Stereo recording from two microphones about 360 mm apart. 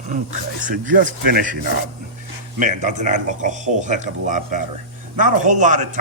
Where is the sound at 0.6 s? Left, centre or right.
Right.